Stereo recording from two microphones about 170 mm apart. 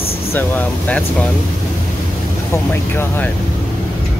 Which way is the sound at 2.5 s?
15° left (ahead or behind).